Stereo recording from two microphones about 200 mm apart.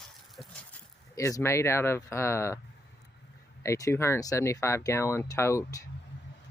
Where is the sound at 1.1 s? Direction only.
15° left (ahead or behind).